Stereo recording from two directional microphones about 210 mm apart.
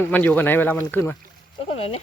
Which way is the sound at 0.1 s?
10° left (ahead or behind).